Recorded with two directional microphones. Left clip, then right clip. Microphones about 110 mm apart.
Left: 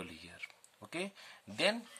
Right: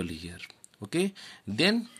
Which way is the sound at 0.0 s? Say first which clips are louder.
Right 8 dB; 40° right (ahead or behind).